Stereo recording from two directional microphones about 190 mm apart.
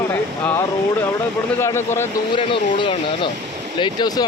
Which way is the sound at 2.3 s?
25° left (ahead or behind).